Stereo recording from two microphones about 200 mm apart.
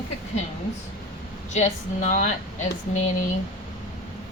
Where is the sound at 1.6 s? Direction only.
35° left (ahead or behind).